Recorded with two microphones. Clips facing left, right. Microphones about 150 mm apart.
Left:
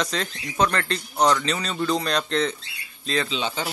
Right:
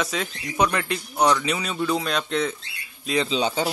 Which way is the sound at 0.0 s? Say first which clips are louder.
Even; 5° right (ahead or behind).